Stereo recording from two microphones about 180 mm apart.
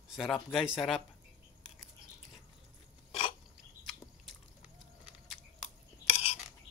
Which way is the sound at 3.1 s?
30° left (ahead or behind).